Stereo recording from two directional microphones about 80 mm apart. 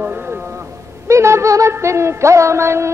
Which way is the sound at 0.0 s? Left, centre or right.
Right.